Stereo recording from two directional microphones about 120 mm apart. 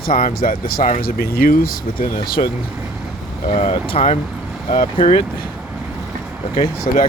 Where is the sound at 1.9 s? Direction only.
40° left (ahead or behind).